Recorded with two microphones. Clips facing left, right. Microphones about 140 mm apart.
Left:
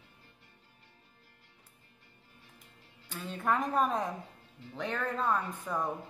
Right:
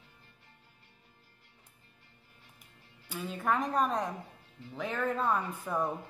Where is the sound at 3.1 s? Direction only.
5° right (ahead or behind).